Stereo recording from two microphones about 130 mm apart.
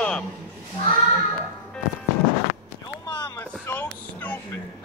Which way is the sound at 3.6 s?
15° left (ahead or behind).